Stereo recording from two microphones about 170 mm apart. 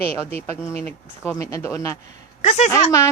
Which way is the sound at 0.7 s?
10° left (ahead or behind).